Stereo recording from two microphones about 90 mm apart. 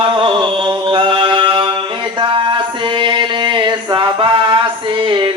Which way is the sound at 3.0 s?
60° right (ahead or behind).